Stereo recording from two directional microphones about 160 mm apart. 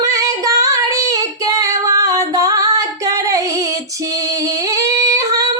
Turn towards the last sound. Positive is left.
turn(degrees=-20)  # may be behind; listen again after turning